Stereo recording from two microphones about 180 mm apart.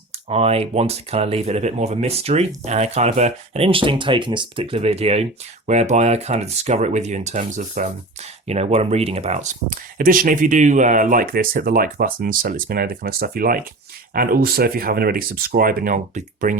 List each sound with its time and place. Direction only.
0.3 s speech: 35° right (ahead or behind)